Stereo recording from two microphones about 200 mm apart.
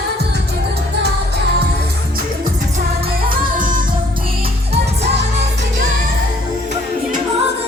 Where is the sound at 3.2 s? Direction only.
45° right (ahead or behind).